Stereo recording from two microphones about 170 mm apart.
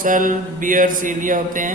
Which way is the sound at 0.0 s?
50° right (ahead or behind).